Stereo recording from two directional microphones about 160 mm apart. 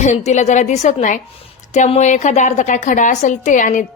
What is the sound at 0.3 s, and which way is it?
A woman's voice, 45° left (ahead or behind).